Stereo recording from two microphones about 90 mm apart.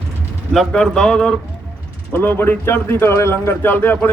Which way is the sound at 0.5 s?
5° left (ahead or behind).